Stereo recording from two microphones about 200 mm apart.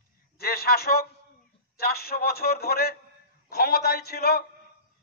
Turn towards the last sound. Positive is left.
turn(degrees=50)  # may be behind; listen again after turning